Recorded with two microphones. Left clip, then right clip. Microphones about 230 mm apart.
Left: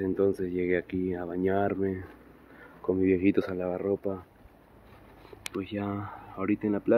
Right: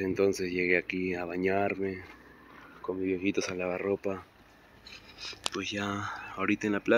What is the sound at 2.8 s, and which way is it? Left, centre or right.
Speech, left.